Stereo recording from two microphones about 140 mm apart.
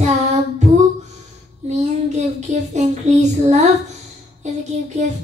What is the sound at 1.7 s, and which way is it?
Child singing, 55° right (ahead or behind).